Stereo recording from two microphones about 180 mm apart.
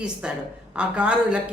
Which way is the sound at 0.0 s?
5° right (ahead or behind).